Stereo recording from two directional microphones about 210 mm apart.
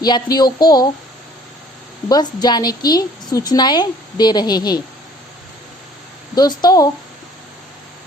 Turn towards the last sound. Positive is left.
turn(degrees=20)  # may be behind; listen again after turning